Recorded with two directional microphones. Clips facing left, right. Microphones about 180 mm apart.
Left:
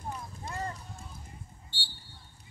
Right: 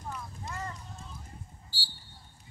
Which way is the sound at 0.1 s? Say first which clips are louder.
Left 1 dB; 35° left (ahead or behind).